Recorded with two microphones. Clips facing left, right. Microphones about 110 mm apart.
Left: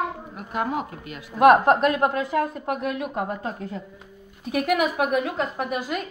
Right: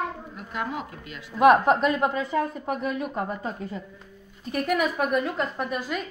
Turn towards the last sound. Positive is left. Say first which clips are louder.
# left 2 dB
turn(degrees=5)  # may be behind; listen again after turning